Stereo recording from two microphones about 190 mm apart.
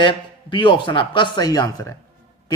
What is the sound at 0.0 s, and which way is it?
A man's voice, 25° left (ahead or behind).